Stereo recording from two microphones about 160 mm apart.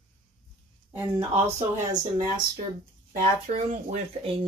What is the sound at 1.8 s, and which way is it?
Speech, 25° right (ahead or behind).